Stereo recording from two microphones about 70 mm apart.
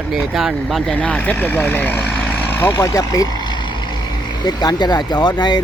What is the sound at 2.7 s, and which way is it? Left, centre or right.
Speech, left.